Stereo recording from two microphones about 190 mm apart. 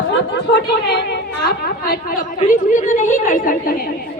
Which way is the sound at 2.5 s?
40° left (ahead or behind).